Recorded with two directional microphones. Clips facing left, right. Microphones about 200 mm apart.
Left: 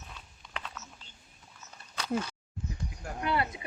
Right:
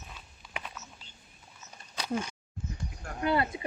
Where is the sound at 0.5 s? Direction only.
10° right (ahead or behind).